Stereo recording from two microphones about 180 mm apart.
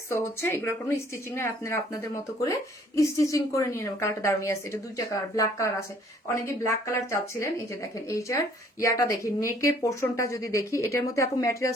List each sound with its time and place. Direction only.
0.1 s speech: 15° left (ahead or behind)